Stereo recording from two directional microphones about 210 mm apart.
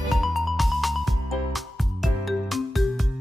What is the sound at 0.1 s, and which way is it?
Music, centre (ahead or behind).